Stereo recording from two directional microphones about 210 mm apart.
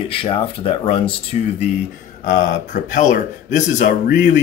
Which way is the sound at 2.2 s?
40° left (ahead or behind).